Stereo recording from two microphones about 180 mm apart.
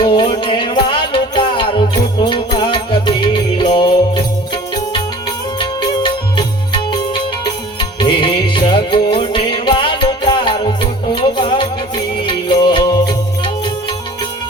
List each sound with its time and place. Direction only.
0.0 s music: 30° left (ahead or behind)
5.5 s music: 25° left (ahead or behind)